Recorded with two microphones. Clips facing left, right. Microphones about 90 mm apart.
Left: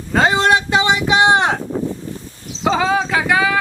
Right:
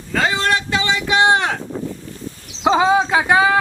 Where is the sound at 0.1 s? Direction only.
20° left (ahead or behind).